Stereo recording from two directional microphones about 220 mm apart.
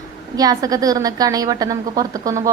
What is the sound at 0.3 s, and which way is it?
Speech, 15° right (ahead or behind).